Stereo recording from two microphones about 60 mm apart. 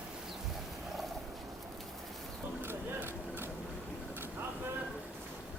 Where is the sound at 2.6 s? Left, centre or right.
Right.